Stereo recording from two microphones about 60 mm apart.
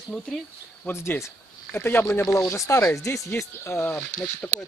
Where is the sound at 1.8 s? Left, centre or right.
Left.